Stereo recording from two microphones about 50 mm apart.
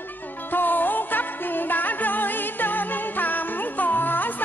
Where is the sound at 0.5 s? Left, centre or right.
Left.